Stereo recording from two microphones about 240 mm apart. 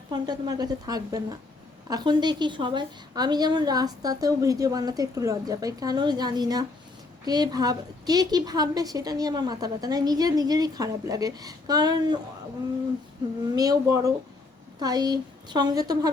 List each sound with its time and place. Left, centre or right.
0.1 s a woman's voice: centre
13.6 s a woman's voice: centre